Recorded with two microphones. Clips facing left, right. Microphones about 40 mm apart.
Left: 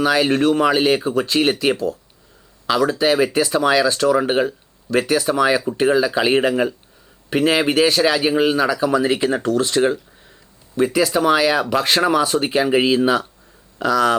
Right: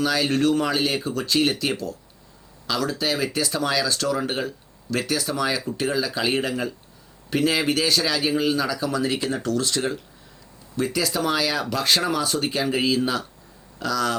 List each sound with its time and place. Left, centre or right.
0.0 s speech: left